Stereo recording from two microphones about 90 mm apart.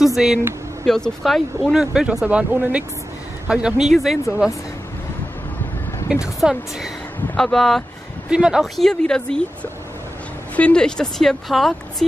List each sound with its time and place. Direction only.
0.0 s a woman's voice: 5° right (ahead or behind)
2.0 s a woman's voice: 15° right (ahead or behind)
6.2 s a woman's voice: 5° right (ahead or behind)
8.3 s a woman's voice: 10° right (ahead or behind)